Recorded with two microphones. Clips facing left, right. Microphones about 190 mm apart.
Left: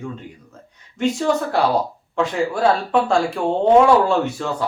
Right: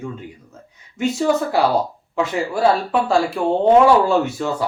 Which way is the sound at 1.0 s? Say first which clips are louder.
Right 1 dB; 5° right (ahead or behind).